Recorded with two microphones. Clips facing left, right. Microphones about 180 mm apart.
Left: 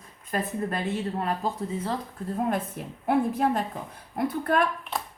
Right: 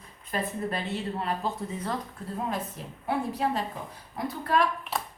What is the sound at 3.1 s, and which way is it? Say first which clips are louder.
A woman's voice: left 5 dB; 50° left (ahead or behind).